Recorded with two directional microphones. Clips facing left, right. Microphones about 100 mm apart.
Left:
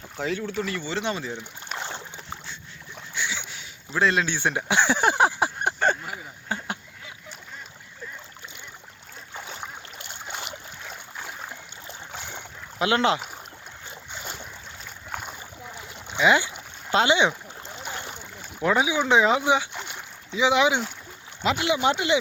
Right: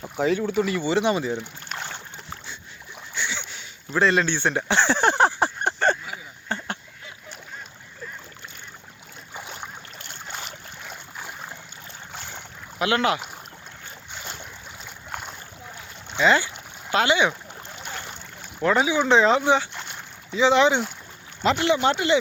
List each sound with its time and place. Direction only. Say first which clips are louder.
0.2 s speech: right 6 dB; 5° right (ahead or behind)
1.8 s boat: left 1 dB; 20° left (ahead or behind)
3.2 s boat: right 1 dB; 5° left (ahead or behind)
3.9 s speech: right 2 dB; centre (ahead or behind)
6.1 s a sound: even; 10° left (ahead or behind)
9.3 s boat: even; 5° right (ahead or behind)
10.0 s boat: left 1 dB; 15° left (ahead or behind)
10.8 s boat: right 1 dB; 5° right (ahead or behind)
12.1 s boat: even; 10° left (ahead or behind)
12.8 s speech: even; 25° left (ahead or behind)
14.1 s boat: even; 5° left (ahead or behind)
18.6 s speech: right 2 dB; 10° left (ahead or behind)